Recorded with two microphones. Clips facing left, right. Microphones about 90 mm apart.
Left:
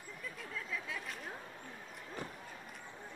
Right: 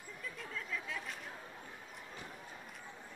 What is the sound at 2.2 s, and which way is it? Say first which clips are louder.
Run: left 7 dB; 45° left (ahead or behind).